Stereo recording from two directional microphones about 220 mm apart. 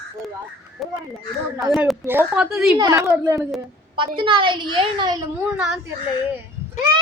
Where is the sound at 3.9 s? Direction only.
20° right (ahead or behind).